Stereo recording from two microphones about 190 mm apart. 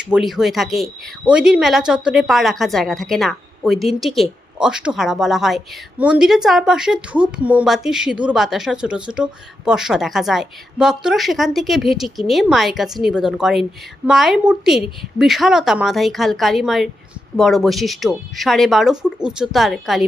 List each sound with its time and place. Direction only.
0.0 s speech: 5° right (ahead or behind)